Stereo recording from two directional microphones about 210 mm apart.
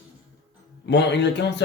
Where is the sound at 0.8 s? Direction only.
55° left (ahead or behind).